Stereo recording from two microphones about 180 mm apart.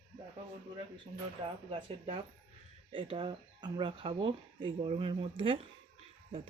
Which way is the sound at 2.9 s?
30° right (ahead or behind).